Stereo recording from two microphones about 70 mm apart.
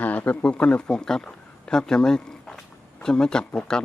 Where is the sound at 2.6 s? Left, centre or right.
Centre.